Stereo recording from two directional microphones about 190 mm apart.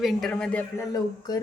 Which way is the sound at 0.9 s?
20° left (ahead or behind).